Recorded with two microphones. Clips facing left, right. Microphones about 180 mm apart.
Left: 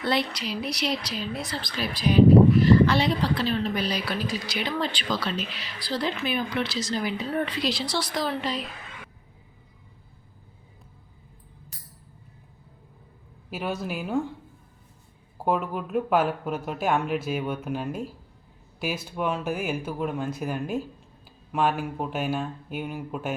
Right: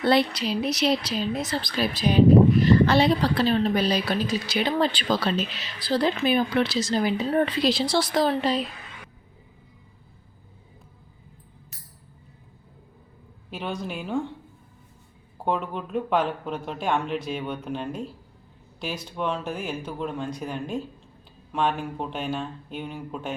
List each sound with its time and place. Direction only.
0.0 s speech: 30° right (ahead or behind)
13.5 s speech: 5° left (ahead or behind)
15.4 s speech: 5° left (ahead or behind)